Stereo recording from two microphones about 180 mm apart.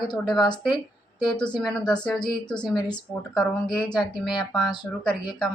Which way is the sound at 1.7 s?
5° left (ahead or behind).